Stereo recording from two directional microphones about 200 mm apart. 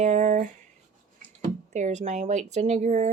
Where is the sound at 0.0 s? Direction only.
35° right (ahead or behind).